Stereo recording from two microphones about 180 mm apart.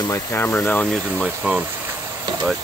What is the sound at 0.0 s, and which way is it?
Speech, 15° left (ahead or behind).